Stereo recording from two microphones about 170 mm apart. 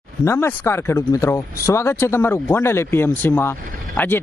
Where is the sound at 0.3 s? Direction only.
15° left (ahead or behind).